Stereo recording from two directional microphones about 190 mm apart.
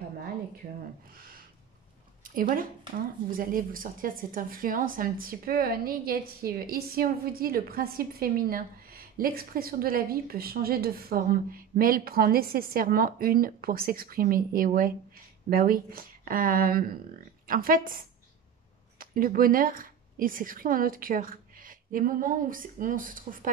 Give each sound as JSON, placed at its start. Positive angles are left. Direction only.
{"t": 2.2, "sound": "a woman's voice", "side_deg": -50}
{"t": 18.9, "sound": "a woman's voice", "side_deg": -50}